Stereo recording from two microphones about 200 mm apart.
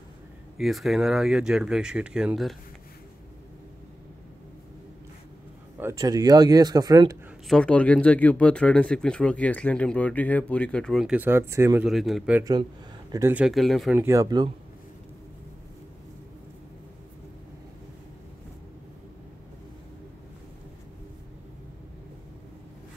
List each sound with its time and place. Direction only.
0.6 s speech: centre (ahead or behind)
5.8 s speech: 15° right (ahead or behind)
7.4 s speech: 5° left (ahead or behind); by 11.9 s 10° right (ahead or behind)
11.9 s speech: centre (ahead or behind)
13.9 s speech: 15° right (ahead or behind)